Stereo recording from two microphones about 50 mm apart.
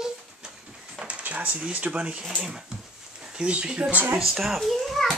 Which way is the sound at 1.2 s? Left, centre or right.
Right.